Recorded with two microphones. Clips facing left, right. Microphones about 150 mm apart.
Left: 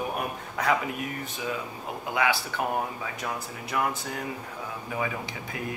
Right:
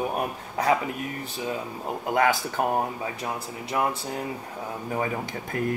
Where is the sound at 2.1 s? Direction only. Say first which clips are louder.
Right 4 dB; 45° right (ahead or behind); by 4.2 s 30° right (ahead or behind).